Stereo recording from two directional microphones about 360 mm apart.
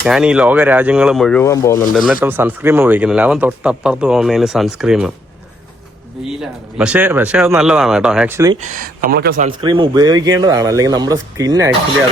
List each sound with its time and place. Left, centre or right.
0.0 s speech: centre
2.2 s speech: centre
6.4 s speech: centre
8.6 s speech: right